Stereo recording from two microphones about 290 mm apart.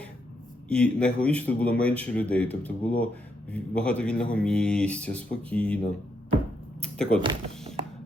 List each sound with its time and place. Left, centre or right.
0.7 s speech: centre
6.8 s a sound: centre
7.2 s speech: centre